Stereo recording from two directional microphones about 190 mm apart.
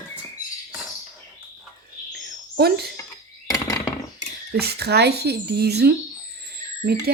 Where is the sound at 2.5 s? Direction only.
55° right (ahead or behind).